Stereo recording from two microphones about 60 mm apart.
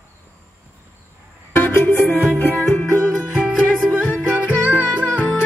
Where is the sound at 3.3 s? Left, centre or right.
Centre.